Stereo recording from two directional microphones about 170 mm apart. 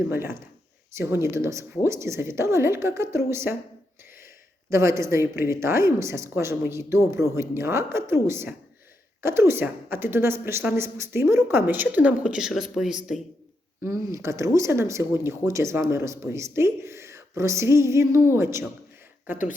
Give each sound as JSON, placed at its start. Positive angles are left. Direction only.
{"t": 0.1, "sound": "a woman's voice", "side_deg": -15}
{"t": 4.7, "sound": "a woman's voice", "side_deg": -15}
{"t": 13.8, "sound": "a woman's voice", "side_deg": -15}